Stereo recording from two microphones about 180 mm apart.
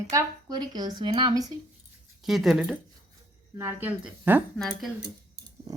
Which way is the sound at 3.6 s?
15° right (ahead or behind).